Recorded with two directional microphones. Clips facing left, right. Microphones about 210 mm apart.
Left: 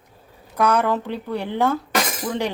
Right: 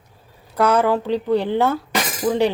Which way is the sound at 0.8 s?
15° right (ahead or behind).